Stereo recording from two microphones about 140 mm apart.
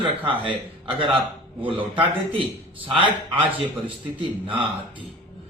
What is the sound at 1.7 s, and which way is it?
Speech, 40° right (ahead or behind).